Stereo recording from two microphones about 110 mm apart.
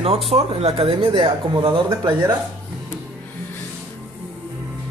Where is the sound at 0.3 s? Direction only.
65° right (ahead or behind); by 2.3 s 45° right (ahead or behind).